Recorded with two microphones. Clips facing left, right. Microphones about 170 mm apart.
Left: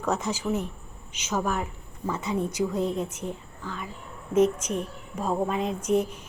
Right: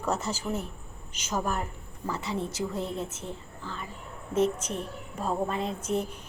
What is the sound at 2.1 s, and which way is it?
A woman's voice, 20° left (ahead or behind).